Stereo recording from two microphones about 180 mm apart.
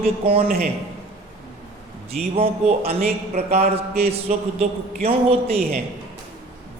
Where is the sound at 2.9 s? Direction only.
55° right (ahead or behind).